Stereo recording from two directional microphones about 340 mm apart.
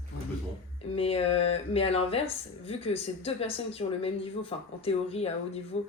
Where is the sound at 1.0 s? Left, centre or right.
Centre.